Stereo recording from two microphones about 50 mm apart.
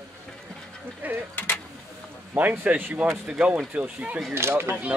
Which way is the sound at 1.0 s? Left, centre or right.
Right.